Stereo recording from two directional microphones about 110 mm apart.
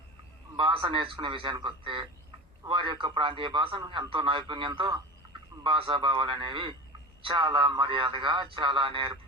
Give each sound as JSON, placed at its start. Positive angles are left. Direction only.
{"t": 0.5, "sound": "a man's voice", "side_deg": -50}